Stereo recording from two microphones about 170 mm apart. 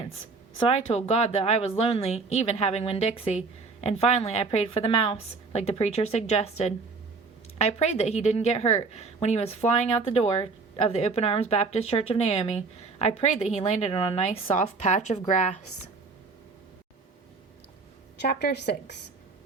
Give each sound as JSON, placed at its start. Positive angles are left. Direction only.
{"t": 0.5, "sound": "a woman's voice", "side_deg": 35}
{"t": 18.2, "sound": "a woman's voice", "side_deg": 75}